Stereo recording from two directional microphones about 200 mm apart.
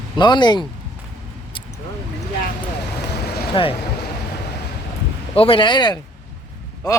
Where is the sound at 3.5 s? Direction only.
25° left (ahead or behind).